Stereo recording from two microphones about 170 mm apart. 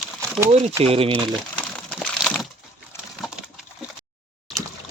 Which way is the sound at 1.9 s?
5° left (ahead or behind).